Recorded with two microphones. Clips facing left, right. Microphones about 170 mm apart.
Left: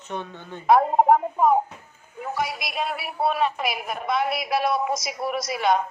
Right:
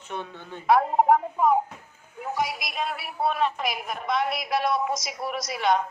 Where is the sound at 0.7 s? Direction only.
35° left (ahead or behind).